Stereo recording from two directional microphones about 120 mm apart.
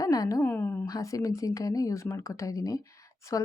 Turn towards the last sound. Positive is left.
turn(degrees=25)  # may be behind; listen again after turning